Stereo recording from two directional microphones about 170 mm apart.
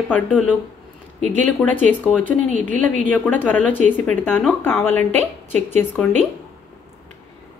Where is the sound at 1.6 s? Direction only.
5° left (ahead or behind).